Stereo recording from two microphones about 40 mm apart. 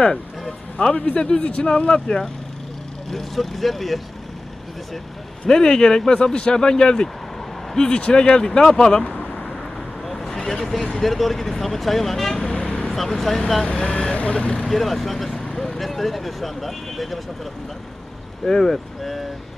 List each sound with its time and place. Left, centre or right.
0.9 s a man's voice: left
3.1 s speech: centre
5.5 s speech: centre
9.1 s vehicle: centre
11.0 s speech: centre
12.4 s vehicle: left
12.9 s speech: centre
13.7 s speech: left
14.7 s speech: centre
18.4 s speech: centre